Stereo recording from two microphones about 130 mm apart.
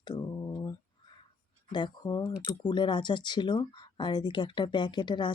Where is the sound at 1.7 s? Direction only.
35° left (ahead or behind).